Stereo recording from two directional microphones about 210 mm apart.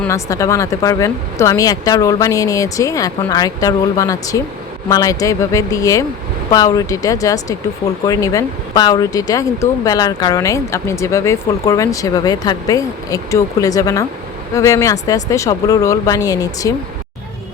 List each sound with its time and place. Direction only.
0.0 s speech: 15° left (ahead or behind)